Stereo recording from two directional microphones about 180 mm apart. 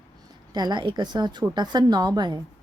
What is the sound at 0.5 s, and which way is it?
Speech, 25° right (ahead or behind).